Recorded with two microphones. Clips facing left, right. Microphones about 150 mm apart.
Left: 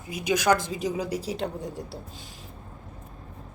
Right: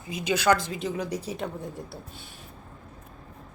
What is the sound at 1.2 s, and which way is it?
Speech, 80° left.